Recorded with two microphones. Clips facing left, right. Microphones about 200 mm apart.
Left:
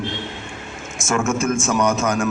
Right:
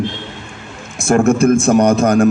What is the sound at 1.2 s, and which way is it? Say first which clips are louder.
Speech: right 10 dB; 35° right (ahead or behind).